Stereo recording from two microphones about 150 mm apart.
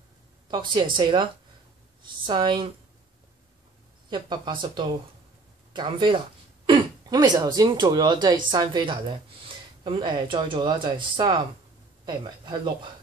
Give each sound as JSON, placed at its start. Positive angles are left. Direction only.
{"t": 0.7, "sound": "speech", "side_deg": -30}
{"t": 4.1, "sound": "speech", "side_deg": -30}
{"t": 5.7, "sound": "a sound", "side_deg": -30}
{"t": 7.5, "sound": "speech", "side_deg": -30}